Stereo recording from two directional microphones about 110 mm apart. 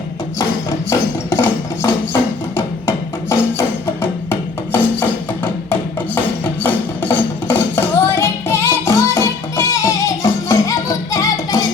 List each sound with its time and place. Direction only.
0.9 s a sound: 25° left (ahead or behind)
2.6 s music: 25° left (ahead or behind)
6.4 s music: 15° left (ahead or behind); by 11.6 s 30° left (ahead or behind)